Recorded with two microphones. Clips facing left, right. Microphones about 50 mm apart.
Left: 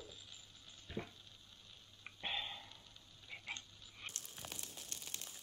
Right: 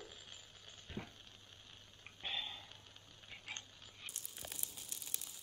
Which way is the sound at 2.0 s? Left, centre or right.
Centre.